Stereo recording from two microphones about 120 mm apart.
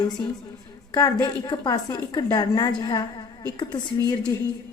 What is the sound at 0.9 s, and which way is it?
A woman's voice, 35° left (ahead or behind).